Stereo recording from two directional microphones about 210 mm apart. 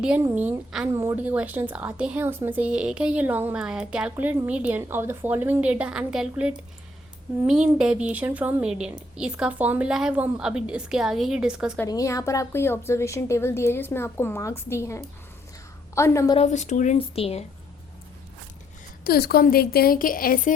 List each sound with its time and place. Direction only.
0.0 s a woman's voice: 5° right (ahead or behind)
11.8 s a woman's voice: 15° left (ahead or behind)
16.4 s speech: 35° left (ahead or behind)
19.0 s a woman's voice: 45° left (ahead or behind)